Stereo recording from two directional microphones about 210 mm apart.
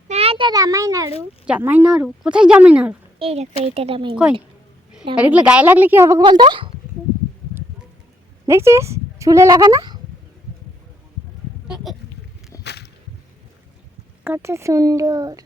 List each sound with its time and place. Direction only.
0.1 s a sound: 30° right (ahead or behind)
1.2 s speech: 10° right (ahead or behind)
3.2 s a woman's voice: 30° right (ahead or behind)
5.1 s speech: 5° right (ahead or behind); by 6.7 s 20° right (ahead or behind)
8.4 s speech: 10° right (ahead or behind)
11.7 s goat: centre (ahead or behind)
12.6 s a sound: 50° left (ahead or behind)
14.3 s speech: 10° right (ahead or behind)